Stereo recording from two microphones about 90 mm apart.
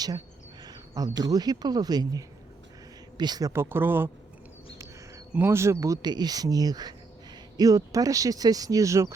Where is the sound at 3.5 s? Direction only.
25° right (ahead or behind).